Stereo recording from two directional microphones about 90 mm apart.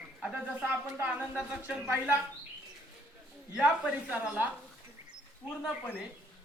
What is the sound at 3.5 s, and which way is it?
Speech, 15° right (ahead or behind).